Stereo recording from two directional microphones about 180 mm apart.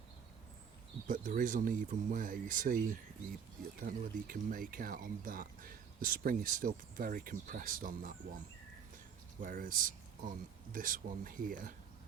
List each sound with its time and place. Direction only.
1.0 s speech: 45° right (ahead or behind)
9.4 s speech: 50° right (ahead or behind)